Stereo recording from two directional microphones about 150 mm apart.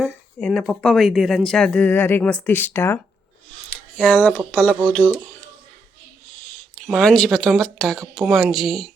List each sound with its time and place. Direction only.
0.0 s speech: 5° left (ahead or behind)
3.7 s a sound: 10° left (ahead or behind)
4.5 s speech: 10° left (ahead or behind)
5.1 s speech: 15° right (ahead or behind)
6.8 s speech: 5° left (ahead or behind)